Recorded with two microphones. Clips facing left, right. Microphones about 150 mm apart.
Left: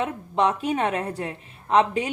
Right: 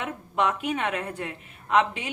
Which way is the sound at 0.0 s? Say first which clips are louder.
Left 4 dB; 30° left (ahead or behind).